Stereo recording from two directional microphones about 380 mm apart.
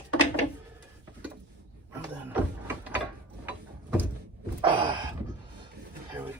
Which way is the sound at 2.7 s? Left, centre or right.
Centre.